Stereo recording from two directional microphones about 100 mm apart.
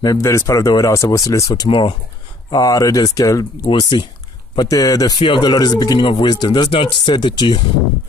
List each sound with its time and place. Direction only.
0.0 s speech: 35° left (ahead or behind)
1.5 s speech: 50° left (ahead or behind)
2.5 s speech: 40° left (ahead or behind)
3.9 s speech: 50° left (ahead or behind)
4.6 s speech: 35° left (ahead or behind)
5.2 s speech: 55° left (ahead or behind)
6.7 s speech: 60° left (ahead or behind)